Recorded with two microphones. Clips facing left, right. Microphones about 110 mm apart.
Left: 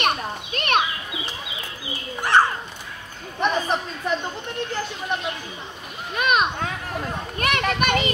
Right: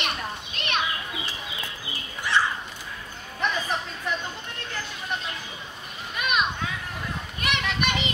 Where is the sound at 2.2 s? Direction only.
50° left (ahead or behind).